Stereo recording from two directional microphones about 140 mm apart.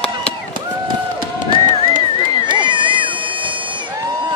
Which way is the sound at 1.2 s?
35° right (ahead or behind).